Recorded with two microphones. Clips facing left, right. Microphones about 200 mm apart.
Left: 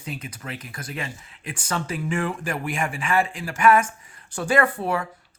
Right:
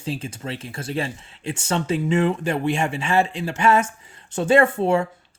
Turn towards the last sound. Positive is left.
turn(degrees=-25)  # may be behind; listen again after turning